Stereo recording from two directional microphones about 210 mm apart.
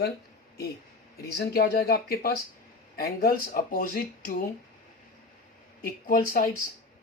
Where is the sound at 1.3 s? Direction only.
50° left (ahead or behind).